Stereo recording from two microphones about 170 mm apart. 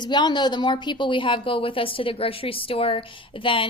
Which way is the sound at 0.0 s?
25° left (ahead or behind).